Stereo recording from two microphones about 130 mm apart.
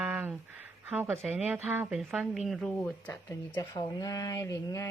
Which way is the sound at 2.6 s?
15° left (ahead or behind).